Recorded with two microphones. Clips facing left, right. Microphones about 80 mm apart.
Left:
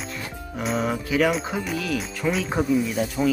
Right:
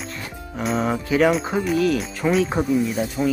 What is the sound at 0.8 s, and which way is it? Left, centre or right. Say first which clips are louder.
Music: right 3 dB; right.